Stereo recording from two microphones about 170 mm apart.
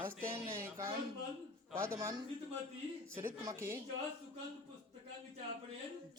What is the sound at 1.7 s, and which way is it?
Speech, 15° right (ahead or behind).